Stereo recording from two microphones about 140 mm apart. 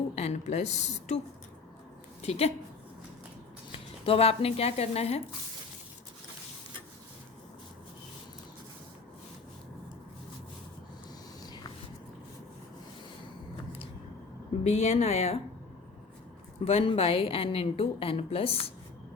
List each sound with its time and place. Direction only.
0.2 s a woman's voice: 50° left (ahead or behind)
2.2 s a woman's voice: 45° left (ahead or behind)
3.7 s speech: 40° left (ahead or behind)
11.4 s a sound: 30° left (ahead or behind)
14.6 s a woman's voice: 55° left (ahead or behind)
16.6 s a woman's voice: 45° left (ahead or behind)